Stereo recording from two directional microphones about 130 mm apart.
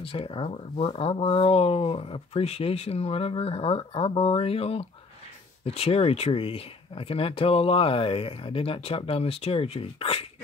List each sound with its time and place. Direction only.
0.0 s speech: 45° left (ahead or behind)